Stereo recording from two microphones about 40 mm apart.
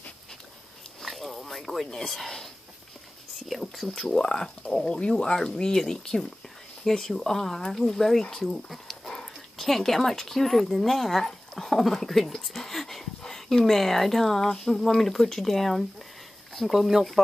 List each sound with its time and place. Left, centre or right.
1.0 s a sound: centre
2.2 s speech: centre
3.4 s whispering: centre
4.1 s speech: centre